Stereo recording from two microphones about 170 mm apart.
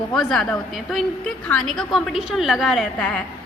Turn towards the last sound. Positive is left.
turn(degrees=5)  # may be behind; listen again after turning